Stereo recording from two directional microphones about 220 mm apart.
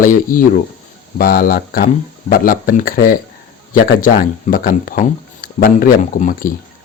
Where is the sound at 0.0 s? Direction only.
40° left (ahead or behind).